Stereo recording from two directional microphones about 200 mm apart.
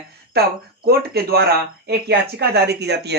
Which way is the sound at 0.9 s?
50° right (ahead or behind).